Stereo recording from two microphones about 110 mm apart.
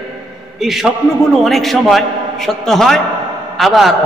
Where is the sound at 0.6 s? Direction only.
5° right (ahead or behind).